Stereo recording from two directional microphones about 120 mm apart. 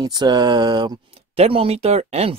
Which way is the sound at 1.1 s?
55° right (ahead or behind).